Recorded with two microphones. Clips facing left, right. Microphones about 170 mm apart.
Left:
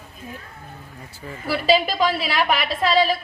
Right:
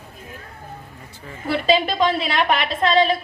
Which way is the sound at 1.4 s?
20° right (ahead or behind).